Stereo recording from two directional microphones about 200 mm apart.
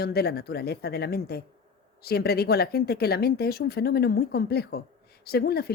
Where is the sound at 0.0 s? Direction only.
50° left (ahead or behind).